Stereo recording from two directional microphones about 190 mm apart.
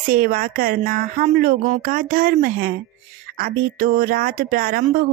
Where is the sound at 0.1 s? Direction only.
50° right (ahead or behind).